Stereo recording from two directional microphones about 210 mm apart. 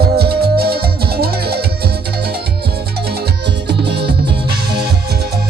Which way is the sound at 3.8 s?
50° right (ahead or behind).